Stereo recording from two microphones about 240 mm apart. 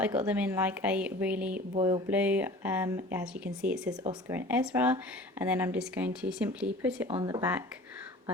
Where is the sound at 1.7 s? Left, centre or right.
Right.